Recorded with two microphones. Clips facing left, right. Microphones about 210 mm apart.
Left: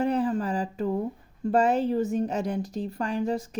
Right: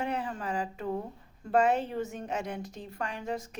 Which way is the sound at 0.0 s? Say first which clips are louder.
Left 9 dB; 35° left (ahead or behind).